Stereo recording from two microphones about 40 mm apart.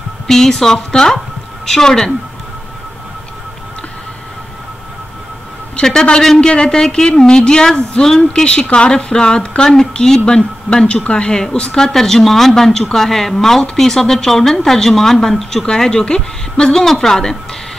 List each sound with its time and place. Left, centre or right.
0.3 s speech: centre
6.2 s a woman's voice: centre